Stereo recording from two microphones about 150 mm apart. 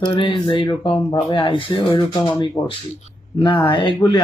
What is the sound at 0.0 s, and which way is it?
Speech, 35° left (ahead or behind).